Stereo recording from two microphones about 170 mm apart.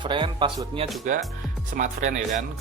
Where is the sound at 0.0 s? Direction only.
30° right (ahead or behind).